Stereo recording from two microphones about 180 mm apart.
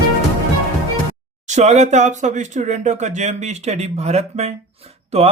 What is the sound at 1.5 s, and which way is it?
A man's voice, 40° right (ahead or behind).